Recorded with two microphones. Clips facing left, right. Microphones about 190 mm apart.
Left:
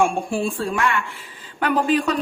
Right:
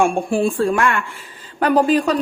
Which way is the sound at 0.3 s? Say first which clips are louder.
Right 6 dB; 55° right (ahead or behind).